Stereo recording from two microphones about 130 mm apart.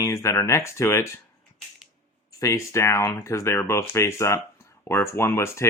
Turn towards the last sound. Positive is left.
turn(degrees=20)  # may be behind; listen again after turning